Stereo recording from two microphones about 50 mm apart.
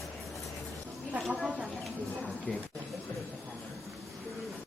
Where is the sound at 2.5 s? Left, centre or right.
Left.